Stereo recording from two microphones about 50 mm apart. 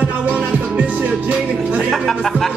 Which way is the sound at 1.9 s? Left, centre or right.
Centre.